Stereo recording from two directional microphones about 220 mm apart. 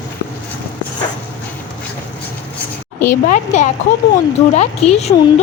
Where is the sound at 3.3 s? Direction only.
35° left (ahead or behind).